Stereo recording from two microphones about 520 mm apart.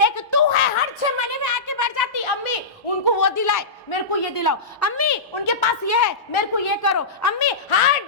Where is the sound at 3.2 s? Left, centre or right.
Left.